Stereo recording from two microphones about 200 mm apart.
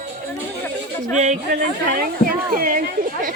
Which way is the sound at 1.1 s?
35° right (ahead or behind).